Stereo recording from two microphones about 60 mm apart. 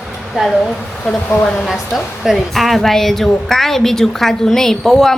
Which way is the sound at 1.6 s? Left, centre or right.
Centre.